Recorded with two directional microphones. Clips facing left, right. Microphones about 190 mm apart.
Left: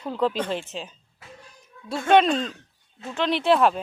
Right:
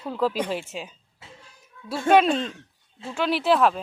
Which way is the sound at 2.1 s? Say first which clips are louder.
Even; 5° right (ahead or behind).